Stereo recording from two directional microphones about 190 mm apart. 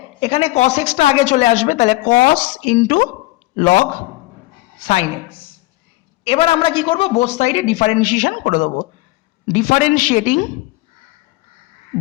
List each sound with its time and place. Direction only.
0.2 s a woman's voice: 30° left (ahead or behind)
4.8 s a woman's voice: 35° left (ahead or behind)